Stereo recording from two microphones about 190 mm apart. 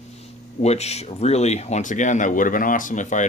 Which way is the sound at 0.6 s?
35° left (ahead or behind).